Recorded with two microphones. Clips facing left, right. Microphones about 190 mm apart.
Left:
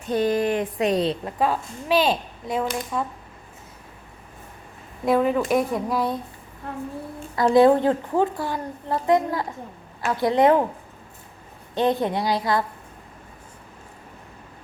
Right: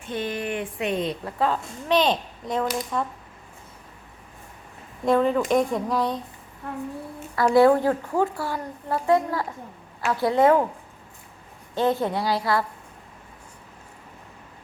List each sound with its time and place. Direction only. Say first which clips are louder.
0.0 s speech: left 7 dB; 40° left (ahead or behind)
1.2 s a child's voice: left 1 dB; 10° left (ahead or behind)
5.0 s a child's voice: even; 5° left (ahead or behind)
7.3 s a woman's voice: left 1 dB; 20° left (ahead or behind)
11.7 s a woman's voice: left 1 dB; 15° left (ahead or behind)